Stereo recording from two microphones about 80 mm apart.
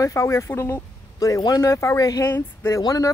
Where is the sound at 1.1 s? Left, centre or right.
Left.